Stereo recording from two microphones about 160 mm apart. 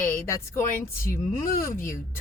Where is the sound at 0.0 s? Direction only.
15° left (ahead or behind).